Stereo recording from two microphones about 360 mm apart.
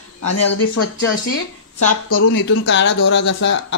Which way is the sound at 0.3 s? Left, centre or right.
Left.